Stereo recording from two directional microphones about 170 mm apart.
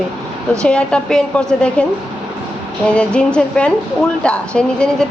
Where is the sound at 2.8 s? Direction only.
5° left (ahead or behind).